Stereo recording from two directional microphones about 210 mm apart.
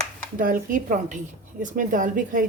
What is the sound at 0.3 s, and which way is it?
Speech, 40° right (ahead or behind).